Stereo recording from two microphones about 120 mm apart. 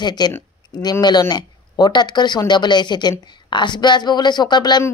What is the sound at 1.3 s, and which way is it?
Speech, 35° left (ahead or behind).